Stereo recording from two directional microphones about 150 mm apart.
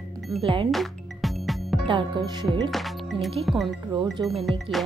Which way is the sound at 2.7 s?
Centre (ahead or behind).